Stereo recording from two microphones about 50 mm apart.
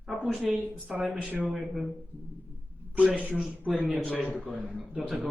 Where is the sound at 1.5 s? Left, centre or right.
Centre.